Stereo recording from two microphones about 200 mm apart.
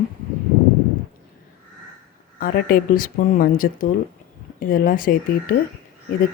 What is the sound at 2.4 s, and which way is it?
A woman's voice, 45° left (ahead or behind).